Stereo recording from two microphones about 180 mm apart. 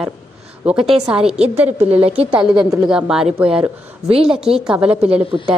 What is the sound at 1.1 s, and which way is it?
Speech, 35° right (ahead or behind).